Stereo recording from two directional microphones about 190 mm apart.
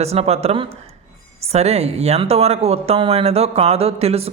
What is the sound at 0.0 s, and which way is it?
Speech, 35° right (ahead or behind).